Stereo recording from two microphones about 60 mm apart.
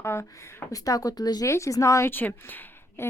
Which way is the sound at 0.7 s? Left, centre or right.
Left.